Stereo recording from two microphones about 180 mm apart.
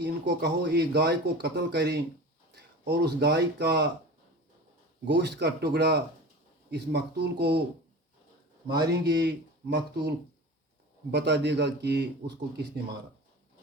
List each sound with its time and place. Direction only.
0.0 s speech: 70° right (ahead or behind)
5.0 s speech: 70° right (ahead or behind)
8.9 s speech: 70° right (ahead or behind)